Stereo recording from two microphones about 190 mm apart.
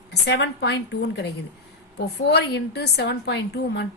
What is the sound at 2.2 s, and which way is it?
Speech, 60° left (ahead or behind).